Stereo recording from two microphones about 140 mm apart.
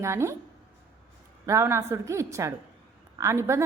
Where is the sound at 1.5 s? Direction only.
20° right (ahead or behind).